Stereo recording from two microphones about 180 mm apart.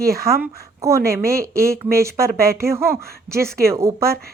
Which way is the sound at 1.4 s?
15° right (ahead or behind).